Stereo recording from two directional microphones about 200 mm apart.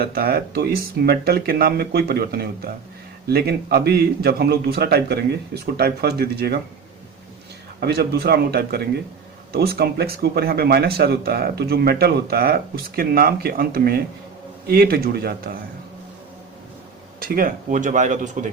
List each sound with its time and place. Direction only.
0.0 s speech: 50° right (ahead or behind)
7.8 s speech: 55° right (ahead or behind)
17.2 s speech: 45° right (ahead or behind)